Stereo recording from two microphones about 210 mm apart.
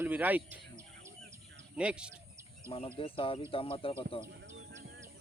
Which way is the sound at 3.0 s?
25° left (ahead or behind).